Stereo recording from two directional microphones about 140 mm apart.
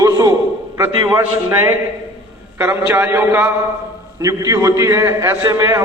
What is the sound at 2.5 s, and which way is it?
A man's voice, 15° right (ahead or behind).